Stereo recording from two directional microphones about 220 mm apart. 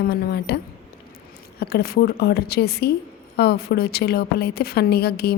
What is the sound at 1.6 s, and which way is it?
A woman's voice, 45° left (ahead or behind).